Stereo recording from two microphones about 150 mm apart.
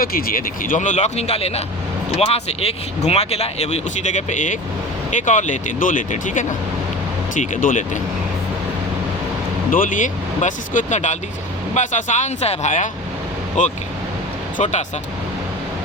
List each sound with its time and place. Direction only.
0.0 s speech: 75° left (ahead or behind); by 7.9 s 60° left (ahead or behind)
9.7 s speech: 65° left (ahead or behind)